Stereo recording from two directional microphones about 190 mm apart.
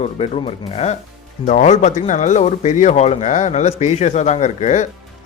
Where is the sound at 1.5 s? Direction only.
40° left (ahead or behind).